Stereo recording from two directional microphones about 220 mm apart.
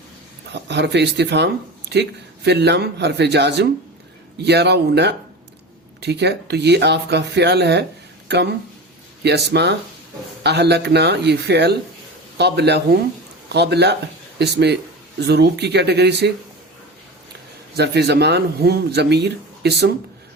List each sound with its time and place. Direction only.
0.5 s speech: 50° right (ahead or behind)
17.7 s speech: 50° right (ahead or behind)